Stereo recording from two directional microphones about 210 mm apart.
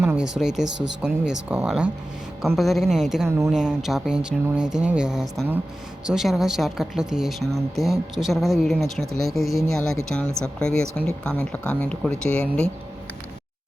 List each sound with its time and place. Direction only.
0.0 s a woman's voice: 5° right (ahead or behind)